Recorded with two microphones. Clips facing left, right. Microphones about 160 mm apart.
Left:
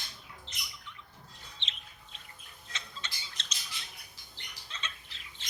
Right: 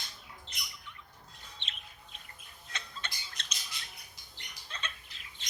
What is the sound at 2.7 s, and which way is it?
Squawk, 55° right (ahead or behind).